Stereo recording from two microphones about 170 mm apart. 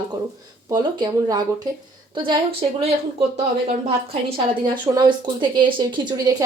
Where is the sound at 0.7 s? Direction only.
25° right (ahead or behind).